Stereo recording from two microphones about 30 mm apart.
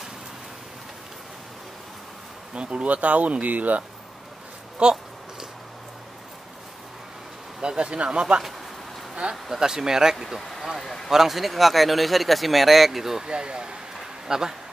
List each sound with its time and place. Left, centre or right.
2.5 s speech: right
4.8 s speech: right
7.6 s speech: right
9.3 s speech: centre
10.1 s speech: centre
13.2 s speech: right
13.9 s a sound: centre